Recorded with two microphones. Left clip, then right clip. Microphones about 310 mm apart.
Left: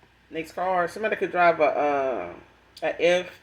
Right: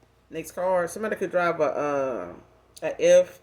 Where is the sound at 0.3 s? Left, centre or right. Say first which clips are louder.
Even; right.